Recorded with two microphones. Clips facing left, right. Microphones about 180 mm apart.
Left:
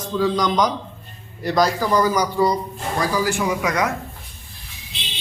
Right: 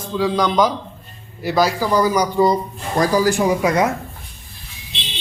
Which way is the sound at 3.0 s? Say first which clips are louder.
Right 6 dB; 40° right (ahead or behind).